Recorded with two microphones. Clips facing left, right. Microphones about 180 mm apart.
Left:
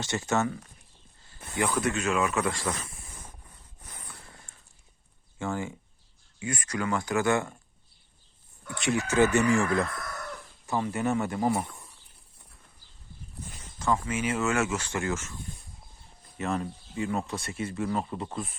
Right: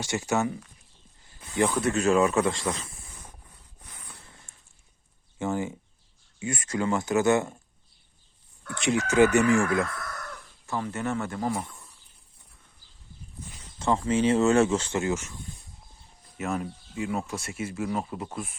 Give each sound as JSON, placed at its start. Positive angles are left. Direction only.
{"t": 0.0, "sound": "speech", "side_deg": -10}
{"t": 1.5, "sound": "speech", "side_deg": -30}
{"t": 4.5, "sound": "a sound", "side_deg": -20}
{"t": 5.4, "sound": "speech", "side_deg": -20}
{"t": 9.0, "sound": "speech", "side_deg": -15}
{"t": 10.7, "sound": "speech", "side_deg": 15}
{"t": 13.7, "sound": "speech", "side_deg": -25}
{"t": 16.4, "sound": "speech", "side_deg": -5}